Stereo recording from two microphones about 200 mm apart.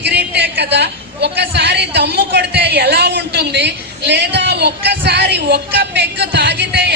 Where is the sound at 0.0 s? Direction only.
60° right (ahead or behind).